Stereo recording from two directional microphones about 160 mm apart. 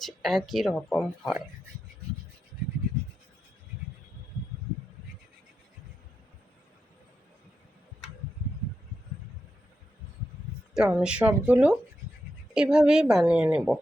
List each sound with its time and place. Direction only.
0.0 s speech: centre (ahead or behind)
10.8 s speech: 5° right (ahead or behind)